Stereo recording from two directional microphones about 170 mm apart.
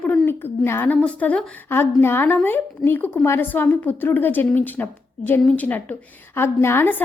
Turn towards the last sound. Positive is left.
turn(degrees=10)  # may be behind; listen again after turning